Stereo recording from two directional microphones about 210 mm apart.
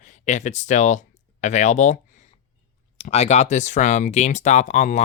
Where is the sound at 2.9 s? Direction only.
30° left (ahead or behind).